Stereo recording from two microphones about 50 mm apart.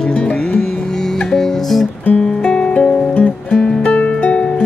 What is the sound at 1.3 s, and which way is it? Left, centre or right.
Music, centre.